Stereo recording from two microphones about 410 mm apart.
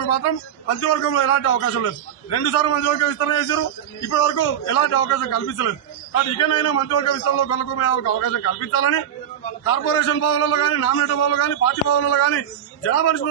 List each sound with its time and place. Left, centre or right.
0.0 s a man's voice: left